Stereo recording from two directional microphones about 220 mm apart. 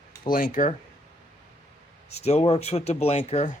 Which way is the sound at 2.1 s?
30° left (ahead or behind).